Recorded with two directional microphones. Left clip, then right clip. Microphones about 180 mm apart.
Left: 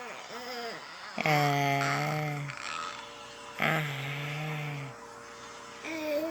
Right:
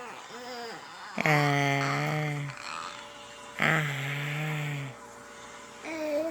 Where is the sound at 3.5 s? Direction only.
15° right (ahead or behind).